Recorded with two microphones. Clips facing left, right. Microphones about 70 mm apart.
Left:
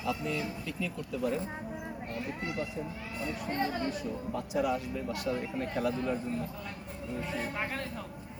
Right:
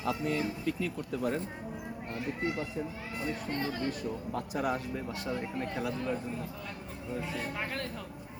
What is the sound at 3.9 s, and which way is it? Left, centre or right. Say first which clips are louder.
Speech: even; right.